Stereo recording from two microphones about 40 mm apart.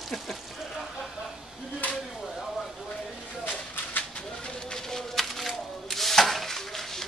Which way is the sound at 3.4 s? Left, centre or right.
Left.